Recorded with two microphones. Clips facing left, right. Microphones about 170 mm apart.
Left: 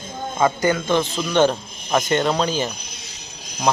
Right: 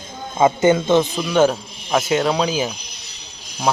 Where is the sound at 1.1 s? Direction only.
Centre (ahead or behind).